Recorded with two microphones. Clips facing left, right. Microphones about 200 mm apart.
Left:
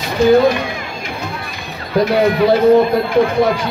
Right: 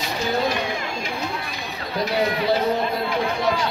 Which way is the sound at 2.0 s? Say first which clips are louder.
Left 10 dB; 55° left (ahead or behind).